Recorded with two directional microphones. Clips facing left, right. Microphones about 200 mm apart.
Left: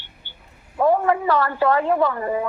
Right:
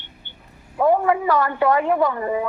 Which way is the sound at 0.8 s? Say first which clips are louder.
Right 1 dB; 10° right (ahead or behind).